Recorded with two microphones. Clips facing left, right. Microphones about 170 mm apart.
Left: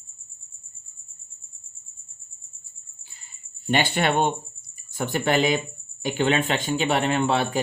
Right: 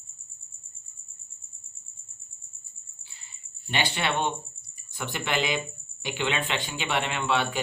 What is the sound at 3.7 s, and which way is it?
Speech, 50° left (ahead or behind).